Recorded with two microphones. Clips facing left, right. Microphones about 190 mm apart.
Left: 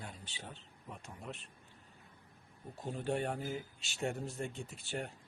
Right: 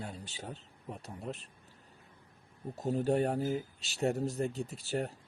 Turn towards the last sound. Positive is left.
turn(degrees=-40)  # may be behind; listen again after turning